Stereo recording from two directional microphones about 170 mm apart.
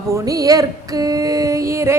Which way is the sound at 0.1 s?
20° right (ahead or behind).